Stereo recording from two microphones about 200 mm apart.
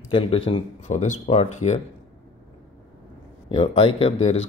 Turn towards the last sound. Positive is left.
turn(degrees=35)  # may be behind; listen again after turning